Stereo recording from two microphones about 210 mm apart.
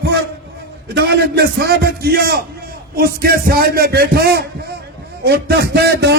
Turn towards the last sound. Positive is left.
turn(degrees=-50)  # may be behind; listen again after turning